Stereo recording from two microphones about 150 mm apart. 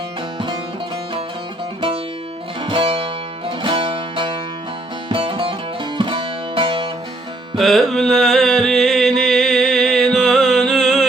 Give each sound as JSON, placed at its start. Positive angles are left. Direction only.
{"t": 2.6, "sound": "music", "side_deg": -35}
{"t": 7.6, "sound": "music", "side_deg": 0}